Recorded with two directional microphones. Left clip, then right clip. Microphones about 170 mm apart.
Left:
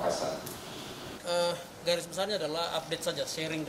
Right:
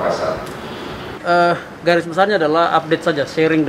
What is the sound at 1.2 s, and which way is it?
Speech, 15° left (ahead or behind).